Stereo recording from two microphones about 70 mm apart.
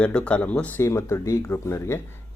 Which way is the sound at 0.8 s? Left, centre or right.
Left.